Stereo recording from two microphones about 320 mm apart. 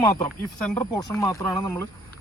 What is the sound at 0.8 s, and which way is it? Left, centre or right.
Speech, centre.